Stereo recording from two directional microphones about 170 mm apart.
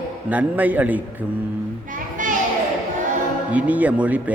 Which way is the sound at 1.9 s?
50° right (ahead or behind).